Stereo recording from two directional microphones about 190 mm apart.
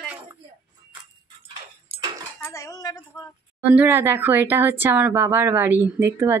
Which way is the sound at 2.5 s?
15° left (ahead or behind).